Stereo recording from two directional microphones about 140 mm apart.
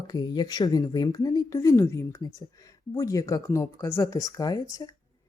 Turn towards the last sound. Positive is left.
turn(degrees=30)  # may be behind; listen again after turning